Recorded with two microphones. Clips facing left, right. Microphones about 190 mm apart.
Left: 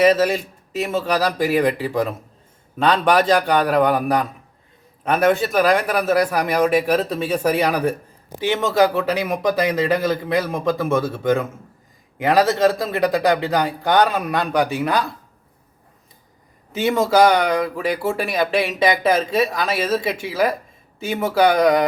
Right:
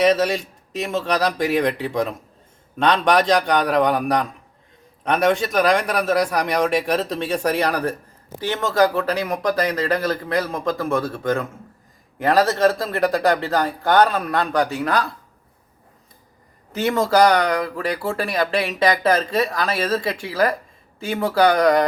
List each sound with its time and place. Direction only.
0.0 s a man's voice: 5° left (ahead or behind)
16.9 s speech: 5° left (ahead or behind)
17.3 s speech: 20° left (ahead or behind)